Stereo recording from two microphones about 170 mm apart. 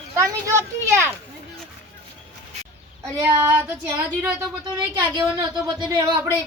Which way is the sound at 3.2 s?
15° right (ahead or behind).